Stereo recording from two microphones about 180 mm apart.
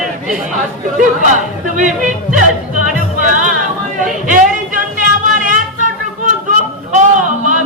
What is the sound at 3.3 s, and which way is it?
Music, 45° right (ahead or behind).